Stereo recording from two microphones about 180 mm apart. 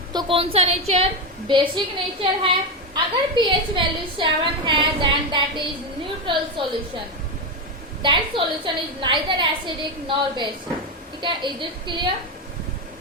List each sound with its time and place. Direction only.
0.1 s a woman's voice: 25° right (ahead or behind)
8.0 s a woman's voice: 25° right (ahead or behind)